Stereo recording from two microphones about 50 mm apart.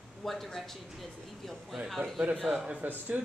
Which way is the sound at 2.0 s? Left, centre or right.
Right.